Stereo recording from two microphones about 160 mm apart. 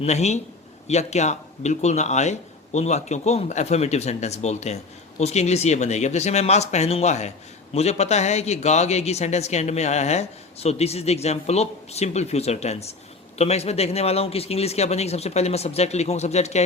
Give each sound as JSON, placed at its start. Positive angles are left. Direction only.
{"t": 0.0, "sound": "speech", "side_deg": 45}